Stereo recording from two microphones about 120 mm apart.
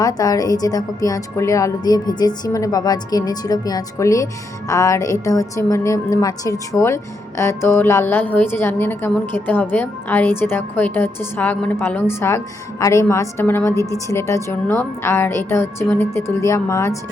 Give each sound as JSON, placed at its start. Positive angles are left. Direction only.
{"t": 0.0, "sound": "a woman's voice", "side_deg": 30}